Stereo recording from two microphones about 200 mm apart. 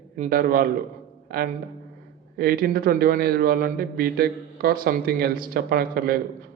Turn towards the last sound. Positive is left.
turn(degrees=-50)  # may be behind; listen again after turning